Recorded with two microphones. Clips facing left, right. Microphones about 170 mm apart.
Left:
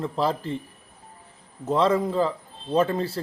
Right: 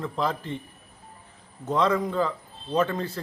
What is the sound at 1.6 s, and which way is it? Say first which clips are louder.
Speech: left 2 dB; 30° left (ahead or behind).